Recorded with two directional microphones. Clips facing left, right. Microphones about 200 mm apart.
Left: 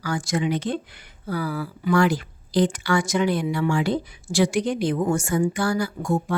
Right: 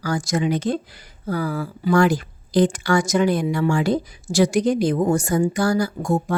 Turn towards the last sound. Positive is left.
turn(degrees=-40)  # may be behind; listen again after turning